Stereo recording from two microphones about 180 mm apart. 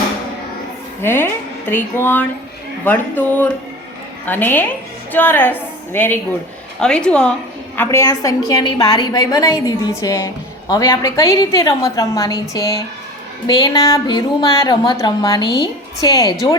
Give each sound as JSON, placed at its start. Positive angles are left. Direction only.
{"t": 1.0, "sound": "a woman's voice", "side_deg": 10}